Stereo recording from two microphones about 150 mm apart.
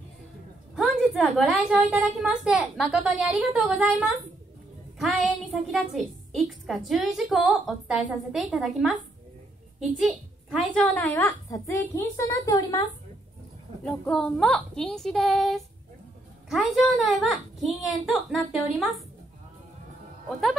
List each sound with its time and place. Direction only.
1.1 s a woman's voice: centre (ahead or behind)
11.1 s speech: 15° left (ahead or behind)
13.8 s a woman's voice: 5° left (ahead or behind)
20.2 s speech: 5° left (ahead or behind)